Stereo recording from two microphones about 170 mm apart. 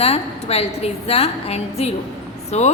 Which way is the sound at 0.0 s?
35° left (ahead or behind).